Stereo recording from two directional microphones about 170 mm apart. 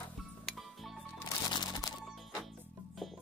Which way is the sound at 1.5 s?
25° left (ahead or behind).